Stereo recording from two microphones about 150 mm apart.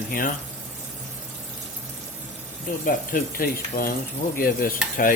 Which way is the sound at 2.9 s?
65° left (ahead or behind).